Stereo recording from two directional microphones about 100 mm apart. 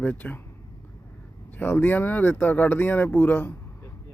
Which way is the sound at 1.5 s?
15° left (ahead or behind).